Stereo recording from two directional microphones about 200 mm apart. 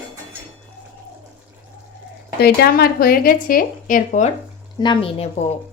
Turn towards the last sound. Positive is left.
turn(degrees=25)  # may be behind; listen again after turning